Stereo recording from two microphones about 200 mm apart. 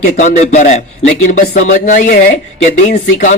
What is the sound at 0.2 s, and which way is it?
Speech, 35° left (ahead or behind).